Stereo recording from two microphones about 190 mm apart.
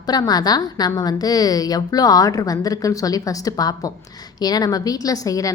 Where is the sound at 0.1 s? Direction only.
20° left (ahead or behind).